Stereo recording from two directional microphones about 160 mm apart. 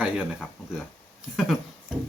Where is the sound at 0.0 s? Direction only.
5° right (ahead or behind).